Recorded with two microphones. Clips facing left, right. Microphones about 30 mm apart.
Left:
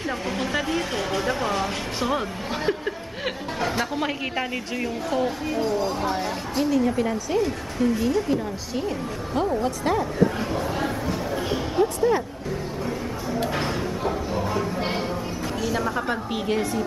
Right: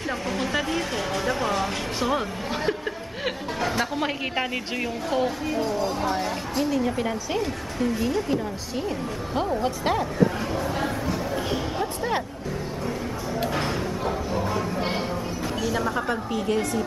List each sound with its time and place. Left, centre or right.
0.4 s a woman's voice: centre
5.1 s a woman's voice: centre
9.6 s speech: centre
10.5 s a woman's voice: centre
13.4 s a sound: centre
15.6 s a woman's voice: centre